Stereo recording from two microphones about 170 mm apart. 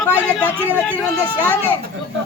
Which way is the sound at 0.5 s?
10° right (ahead or behind).